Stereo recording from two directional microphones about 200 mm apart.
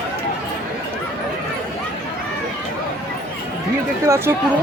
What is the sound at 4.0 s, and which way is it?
Speech, 15° right (ahead or behind).